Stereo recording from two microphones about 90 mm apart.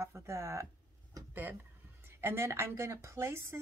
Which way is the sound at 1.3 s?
20° right (ahead or behind).